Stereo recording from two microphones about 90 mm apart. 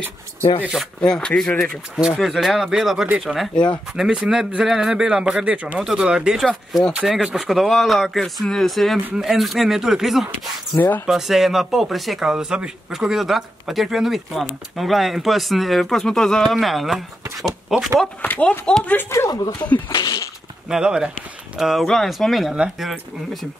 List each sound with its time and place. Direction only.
1.0 s speech: 10° left (ahead or behind)
2.0 s speech: 5° right (ahead or behind)
3.5 s speech: 10° left (ahead or behind)
3.9 s a man's voice: 5° right (ahead or behind)
18.2 s speech: 20° left (ahead or behind)
19.0 s speech: 35° left (ahead or behind)
19.9 s speech: 55° left (ahead or behind)
20.6 s a man's voice: 10° right (ahead or behind)